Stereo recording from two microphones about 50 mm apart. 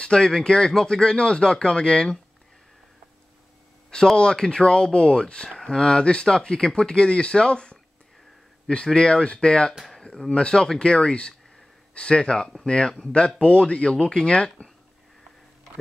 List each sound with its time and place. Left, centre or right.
0.0 s speech: centre
3.9 s speech: centre
8.8 s speech: centre